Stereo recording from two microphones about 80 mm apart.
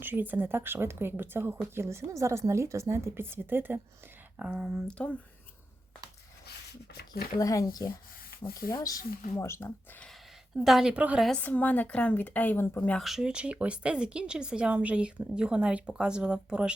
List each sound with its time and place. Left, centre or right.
0.0 s speech: right
4.4 s speech: centre
4.9 s speech: centre
7.3 s speech: left
9.4 s speech: left
10.6 s a woman's voice: centre
10.9 s speech: centre
11.3 s speech: centre
13.0 s speech: centre